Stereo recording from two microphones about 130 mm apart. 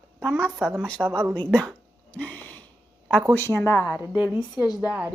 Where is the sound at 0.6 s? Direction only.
10° right (ahead or behind).